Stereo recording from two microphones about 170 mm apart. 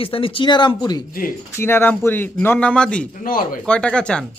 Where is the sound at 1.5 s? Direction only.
15° left (ahead or behind).